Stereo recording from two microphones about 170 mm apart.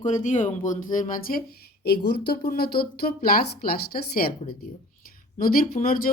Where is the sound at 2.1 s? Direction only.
65° left (ahead or behind).